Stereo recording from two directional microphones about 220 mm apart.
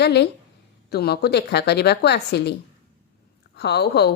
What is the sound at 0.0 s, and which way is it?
A woman's voice, 50° left (ahead or behind).